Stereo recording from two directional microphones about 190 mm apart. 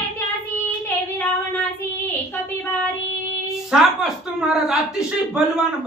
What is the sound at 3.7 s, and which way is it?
Speech, 5° right (ahead or behind).